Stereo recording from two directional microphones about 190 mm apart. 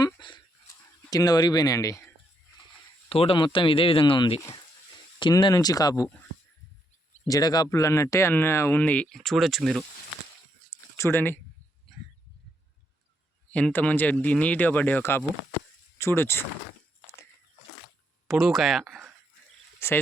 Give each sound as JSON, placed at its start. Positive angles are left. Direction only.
{"t": 0.0, "sound": "dog", "side_deg": 25}
{"t": 1.1, "sound": "speech", "side_deg": 20}
{"t": 3.1, "sound": "speech", "side_deg": 30}
{"t": 7.3, "sound": "speech", "side_deg": 20}
{"t": 10.9, "sound": "speech", "side_deg": 10}
{"t": 13.5, "sound": "speech", "side_deg": 5}
{"t": 18.3, "sound": "speech", "side_deg": 0}
{"t": 19.8, "sound": "speech", "side_deg": 15}